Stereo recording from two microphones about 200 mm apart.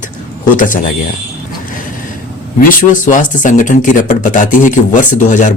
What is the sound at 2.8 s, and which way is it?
Speech, 40° left (ahead or behind).